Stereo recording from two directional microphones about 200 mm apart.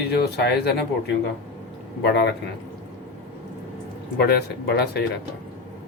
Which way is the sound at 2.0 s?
55° left (ahead or behind).